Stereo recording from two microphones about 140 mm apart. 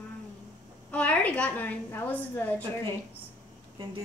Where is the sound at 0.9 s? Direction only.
10° left (ahead or behind).